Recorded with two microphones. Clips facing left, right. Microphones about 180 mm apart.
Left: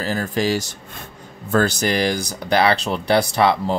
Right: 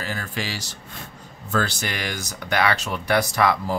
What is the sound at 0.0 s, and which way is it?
Speech, 40° left (ahead or behind).